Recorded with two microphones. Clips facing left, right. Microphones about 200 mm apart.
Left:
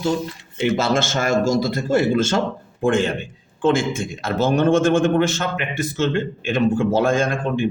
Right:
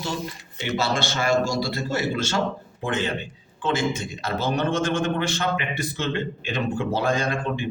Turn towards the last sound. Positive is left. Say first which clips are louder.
# left 6 dB
turn(degrees=50)  # may be behind; listen again after turning